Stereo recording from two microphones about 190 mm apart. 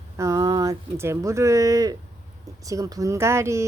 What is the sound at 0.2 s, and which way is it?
Speech, 15° right (ahead or behind).